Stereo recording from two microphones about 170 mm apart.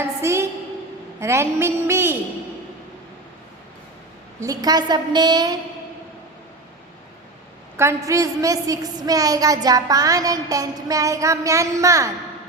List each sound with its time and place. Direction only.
0.0 s a sound: 15° right (ahead or behind)
1.2 s a woman's voice: 15° right (ahead or behind)
4.4 s a woman's voice: 20° right (ahead or behind)
7.8 s a woman's voice: 15° right (ahead or behind)